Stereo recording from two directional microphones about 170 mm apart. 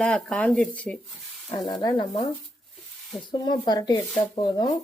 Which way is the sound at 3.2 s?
25° left (ahead or behind).